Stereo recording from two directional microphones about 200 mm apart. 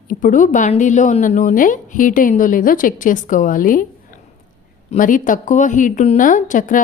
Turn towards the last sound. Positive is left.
turn(degrees=40)  # may be behind; listen again after turning